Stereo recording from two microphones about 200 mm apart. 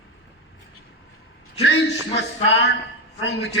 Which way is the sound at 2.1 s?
60° left (ahead or behind).